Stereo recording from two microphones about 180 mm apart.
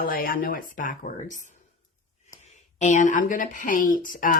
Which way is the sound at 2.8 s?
45° left (ahead or behind).